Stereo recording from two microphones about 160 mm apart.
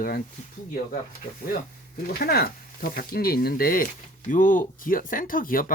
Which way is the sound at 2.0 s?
70° left (ahead or behind).